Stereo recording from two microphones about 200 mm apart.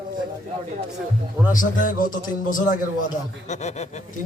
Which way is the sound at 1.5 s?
40° left (ahead or behind).